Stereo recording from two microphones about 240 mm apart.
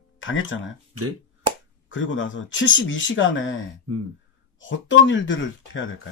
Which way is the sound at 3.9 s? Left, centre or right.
Right.